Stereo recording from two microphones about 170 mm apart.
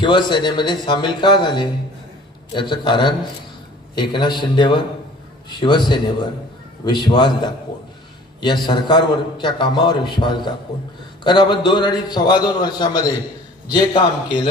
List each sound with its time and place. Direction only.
0.0 s a man's voice: 25° left (ahead or behind)